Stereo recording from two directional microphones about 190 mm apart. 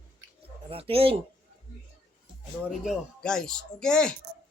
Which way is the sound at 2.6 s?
Centre (ahead or behind).